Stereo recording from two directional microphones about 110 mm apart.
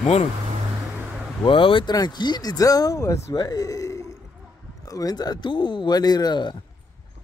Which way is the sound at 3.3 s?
35° left (ahead or behind).